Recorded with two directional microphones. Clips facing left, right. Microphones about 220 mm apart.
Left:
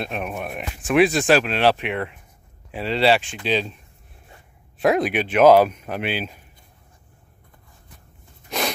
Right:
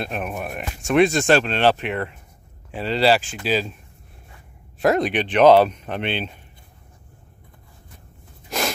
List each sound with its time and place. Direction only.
0.0 s speech: centre (ahead or behind)
4.7 s speech: centre (ahead or behind)
8.5 s a sound: centre (ahead or behind)